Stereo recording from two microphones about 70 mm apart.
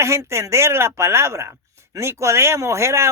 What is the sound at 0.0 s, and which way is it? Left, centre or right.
A man's voice, right.